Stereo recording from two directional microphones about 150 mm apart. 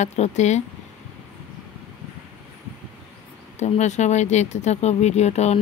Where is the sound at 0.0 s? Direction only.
50° left (ahead or behind).